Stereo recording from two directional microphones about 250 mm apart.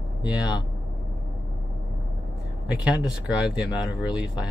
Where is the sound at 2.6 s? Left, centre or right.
Centre.